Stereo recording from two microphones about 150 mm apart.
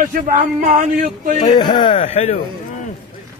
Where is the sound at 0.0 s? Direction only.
60° right (ahead or behind).